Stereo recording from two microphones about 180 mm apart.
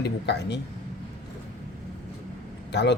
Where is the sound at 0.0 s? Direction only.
70° left (ahead or behind).